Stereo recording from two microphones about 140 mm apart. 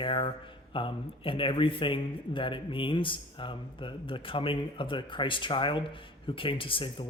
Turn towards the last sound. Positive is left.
turn(degrees=35)  # may be behind; listen again after turning